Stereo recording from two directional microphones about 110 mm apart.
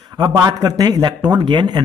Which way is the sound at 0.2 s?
35° right (ahead or behind).